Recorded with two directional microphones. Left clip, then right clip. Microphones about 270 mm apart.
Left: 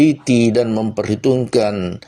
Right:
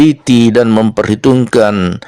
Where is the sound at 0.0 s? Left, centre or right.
Right.